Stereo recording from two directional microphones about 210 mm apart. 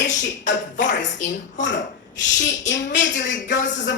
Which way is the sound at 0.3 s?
35° left (ahead or behind).